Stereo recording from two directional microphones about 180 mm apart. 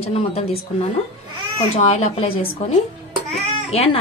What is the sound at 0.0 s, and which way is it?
Speech, 35° left (ahead or behind).